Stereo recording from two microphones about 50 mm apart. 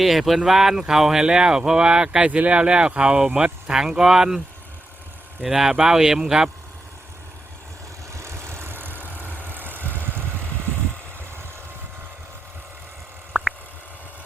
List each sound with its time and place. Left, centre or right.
0.0 s speech: centre
5.4 s speech: centre
8.1 s vehicle: right
13.3 s a sound: centre